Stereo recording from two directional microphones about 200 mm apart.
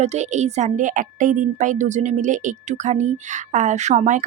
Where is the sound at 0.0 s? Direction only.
35° right (ahead or behind).